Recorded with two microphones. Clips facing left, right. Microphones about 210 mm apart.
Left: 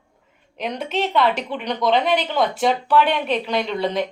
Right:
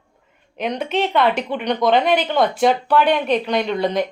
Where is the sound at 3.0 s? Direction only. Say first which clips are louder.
Right 4 dB; 45° right (ahead or behind).